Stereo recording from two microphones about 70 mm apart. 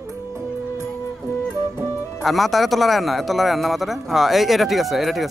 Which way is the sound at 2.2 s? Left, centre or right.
Centre.